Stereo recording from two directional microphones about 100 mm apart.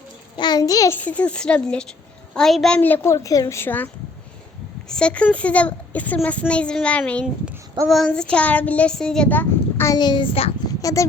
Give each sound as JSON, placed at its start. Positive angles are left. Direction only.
{"t": 0.3, "sound": "a child's voice", "side_deg": 45}
{"t": 0.9, "sound": "a woman's voice", "side_deg": 15}
{"t": 2.7, "sound": "a woman's voice", "side_deg": 20}
{"t": 3.1, "sound": "a woman's voice", "side_deg": 35}
{"t": 3.5, "sound": "a woman's voice", "side_deg": 20}
{"t": 4.9, "sound": "a woman's voice", "side_deg": 10}
{"t": 9.3, "sound": "child singing", "side_deg": 20}
{"t": 9.9, "sound": "a child's voice", "side_deg": 45}
{"t": 10.7, "sound": "a sound", "side_deg": 35}